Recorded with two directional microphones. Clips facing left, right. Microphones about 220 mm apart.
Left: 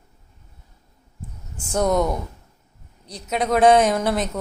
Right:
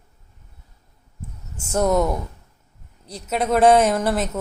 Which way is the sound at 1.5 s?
5° right (ahead or behind).